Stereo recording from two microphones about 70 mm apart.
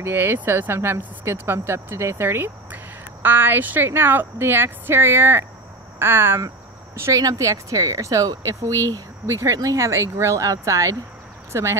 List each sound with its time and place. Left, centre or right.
0.0 s speech: right
7.2 s speech: right